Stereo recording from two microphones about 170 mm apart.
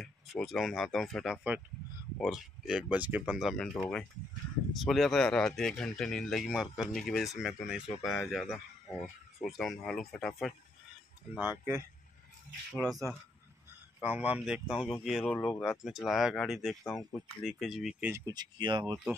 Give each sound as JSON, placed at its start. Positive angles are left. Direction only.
{"t": 0.0, "sound": "speech", "side_deg": 0}
{"t": 9.6, "sound": "speech", "side_deg": 5}
{"t": 11.3, "sound": "speech", "side_deg": -10}
{"t": 14.0, "sound": "speech", "side_deg": -10}
{"t": 15.2, "sound": "speech", "side_deg": 10}
{"t": 15.6, "sound": "speech", "side_deg": 0}
{"t": 18.1, "sound": "speech", "side_deg": -25}